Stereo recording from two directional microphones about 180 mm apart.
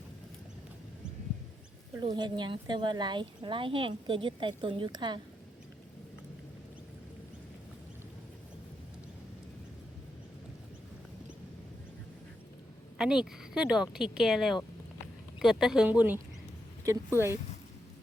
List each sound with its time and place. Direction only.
2.0 s speech: 25° right (ahead or behind)
13.0 s speech: 5° right (ahead or behind)